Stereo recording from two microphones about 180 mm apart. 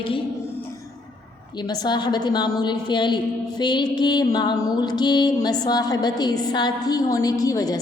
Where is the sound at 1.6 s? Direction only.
25° left (ahead or behind).